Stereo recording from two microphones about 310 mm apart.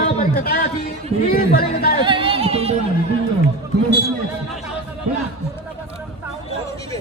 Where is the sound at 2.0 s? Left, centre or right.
Centre.